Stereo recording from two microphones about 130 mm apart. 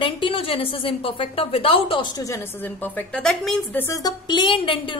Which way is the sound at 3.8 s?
25° left (ahead or behind).